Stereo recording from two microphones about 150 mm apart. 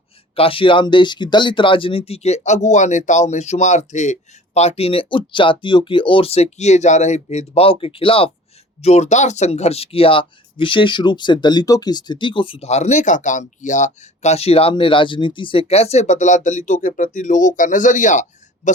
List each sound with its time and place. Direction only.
0.3 s speech: 35° left (ahead or behind)
8.8 s speech: 50° left (ahead or behind)